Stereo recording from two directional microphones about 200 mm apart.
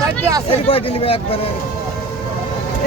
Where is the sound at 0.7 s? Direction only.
30° left (ahead or behind).